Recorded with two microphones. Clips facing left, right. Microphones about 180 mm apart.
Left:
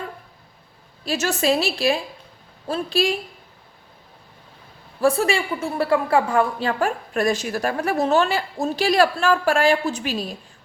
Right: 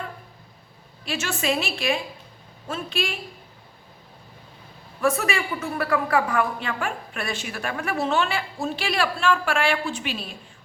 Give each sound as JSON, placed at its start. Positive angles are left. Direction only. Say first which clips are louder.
{"t": 1.0, "sound": "a woman's voice", "louder": "left 5 dB", "side_deg": 40}
{"t": 4.9, "sound": "a woman's voice", "louder": "left 4 dB", "side_deg": 30}